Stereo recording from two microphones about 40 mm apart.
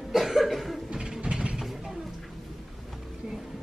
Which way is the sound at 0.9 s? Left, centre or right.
Right.